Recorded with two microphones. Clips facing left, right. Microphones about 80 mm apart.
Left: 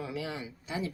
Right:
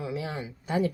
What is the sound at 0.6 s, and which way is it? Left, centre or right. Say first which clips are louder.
Speech: right 9 dB; right.